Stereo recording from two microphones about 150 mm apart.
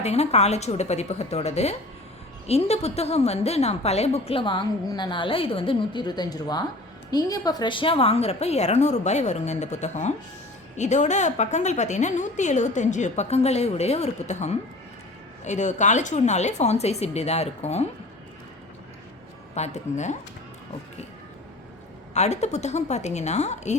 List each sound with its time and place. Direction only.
0.0 s a woman's voice: 45° left (ahead or behind)
19.5 s a woman's voice: 45° left (ahead or behind)
22.1 s a woman's voice: 50° left (ahead or behind)